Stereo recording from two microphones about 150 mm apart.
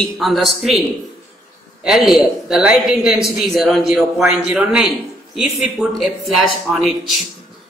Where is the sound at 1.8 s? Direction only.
Centre (ahead or behind).